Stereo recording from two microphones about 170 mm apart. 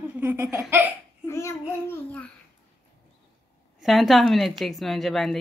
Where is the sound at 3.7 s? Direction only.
Centre (ahead or behind).